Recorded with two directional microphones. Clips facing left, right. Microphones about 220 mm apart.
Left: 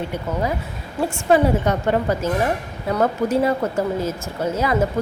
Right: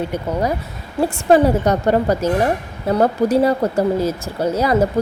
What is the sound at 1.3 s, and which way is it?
A woman's voice, 40° right (ahead or behind).